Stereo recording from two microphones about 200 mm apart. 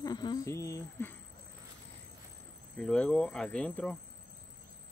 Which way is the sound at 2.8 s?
5° left (ahead or behind).